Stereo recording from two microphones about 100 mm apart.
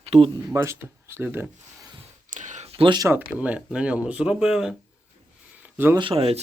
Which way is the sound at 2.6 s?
90° right.